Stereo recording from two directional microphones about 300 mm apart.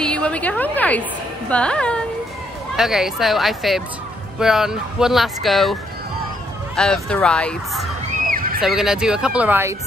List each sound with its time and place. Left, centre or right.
0.0 s a woman's voice: centre
8.3 s a sound: right
8.5 s speech: centre